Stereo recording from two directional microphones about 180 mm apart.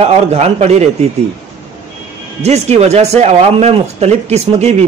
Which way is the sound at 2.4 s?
35° right (ahead or behind).